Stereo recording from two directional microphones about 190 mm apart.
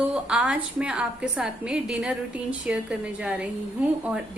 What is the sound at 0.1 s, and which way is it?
A woman's voice, 5° right (ahead or behind).